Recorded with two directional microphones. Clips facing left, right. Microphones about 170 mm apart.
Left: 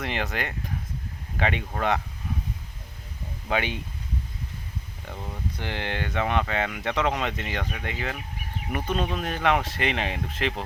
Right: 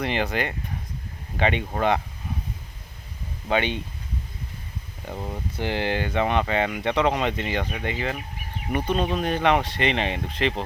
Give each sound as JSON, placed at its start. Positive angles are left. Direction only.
{"t": 0.0, "sound": "speech", "side_deg": 0}
{"t": 3.5, "sound": "speech", "side_deg": 5}
{"t": 5.0, "sound": "speech", "side_deg": -30}
{"t": 5.8, "sound": "speech", "side_deg": -5}